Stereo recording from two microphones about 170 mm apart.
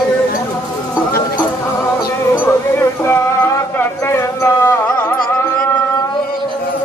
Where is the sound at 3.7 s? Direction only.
15° left (ahead or behind).